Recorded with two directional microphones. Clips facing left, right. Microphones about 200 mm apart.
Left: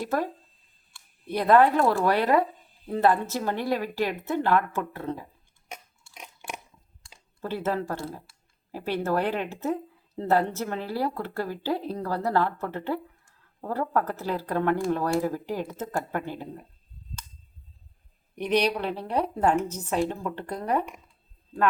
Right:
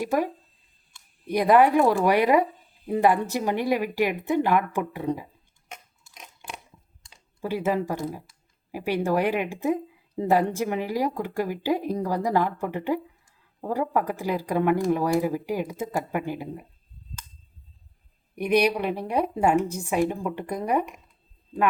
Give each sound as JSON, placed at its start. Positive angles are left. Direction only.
{"t": 0.0, "sound": "speech", "side_deg": -15}
{"t": 1.3, "sound": "speech", "side_deg": -15}
{"t": 7.4, "sound": "speech", "side_deg": -10}
{"t": 18.3, "sound": "speech", "side_deg": -10}